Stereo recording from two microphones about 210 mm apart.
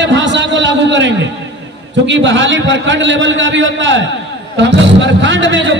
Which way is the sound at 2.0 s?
60° right (ahead or behind).